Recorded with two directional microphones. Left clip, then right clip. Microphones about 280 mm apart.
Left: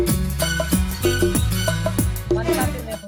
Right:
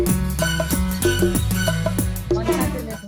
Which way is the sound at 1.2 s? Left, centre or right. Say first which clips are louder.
Even; centre.